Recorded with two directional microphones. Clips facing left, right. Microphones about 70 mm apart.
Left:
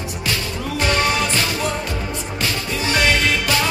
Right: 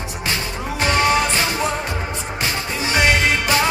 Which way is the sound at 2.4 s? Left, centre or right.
Right.